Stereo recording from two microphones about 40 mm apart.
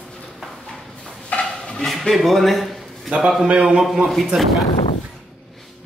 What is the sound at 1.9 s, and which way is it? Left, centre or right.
Speech, centre.